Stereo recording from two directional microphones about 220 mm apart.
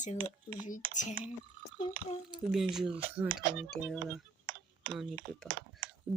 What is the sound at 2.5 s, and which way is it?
Speech, centre (ahead or behind).